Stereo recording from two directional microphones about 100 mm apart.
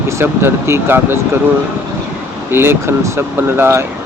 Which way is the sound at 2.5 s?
25° right (ahead or behind).